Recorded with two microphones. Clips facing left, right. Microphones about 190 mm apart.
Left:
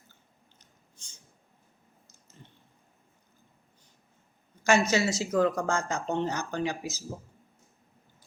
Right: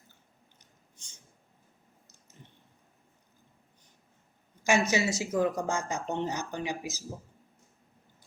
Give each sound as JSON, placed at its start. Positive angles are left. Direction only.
{"t": 4.6, "sound": "speech", "side_deg": -15}